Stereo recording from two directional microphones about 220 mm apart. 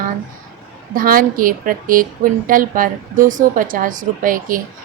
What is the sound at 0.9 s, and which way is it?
A woman's voice, 40° right (ahead or behind).